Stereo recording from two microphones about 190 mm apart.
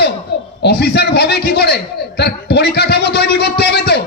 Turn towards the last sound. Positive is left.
turn(degrees=60)  # may be behind; listen again after turning